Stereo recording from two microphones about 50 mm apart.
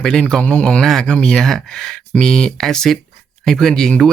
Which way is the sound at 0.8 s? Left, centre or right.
Centre.